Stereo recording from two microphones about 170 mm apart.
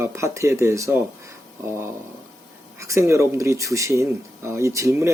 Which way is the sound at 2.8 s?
15° right (ahead or behind).